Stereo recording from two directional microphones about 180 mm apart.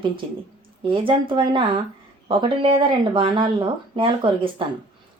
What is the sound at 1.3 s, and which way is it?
Speech, 30° right (ahead or behind).